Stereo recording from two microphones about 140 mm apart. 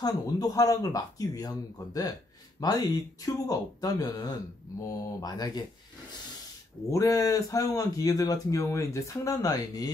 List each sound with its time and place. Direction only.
0.0 s a man's voice: 25° left (ahead or behind)
6.9 s a man's voice: 25° left (ahead or behind)